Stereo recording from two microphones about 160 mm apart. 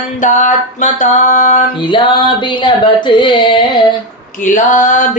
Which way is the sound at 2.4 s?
30° left (ahead or behind).